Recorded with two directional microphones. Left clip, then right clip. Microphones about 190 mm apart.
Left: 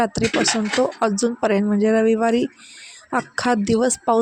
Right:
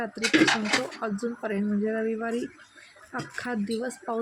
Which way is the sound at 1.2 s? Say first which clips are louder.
Left 11 dB; 45° left (ahead or behind).